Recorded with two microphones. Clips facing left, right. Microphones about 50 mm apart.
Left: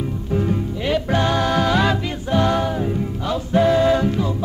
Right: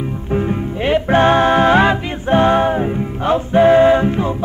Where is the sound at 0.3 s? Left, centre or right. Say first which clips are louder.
Right 3 dB; right.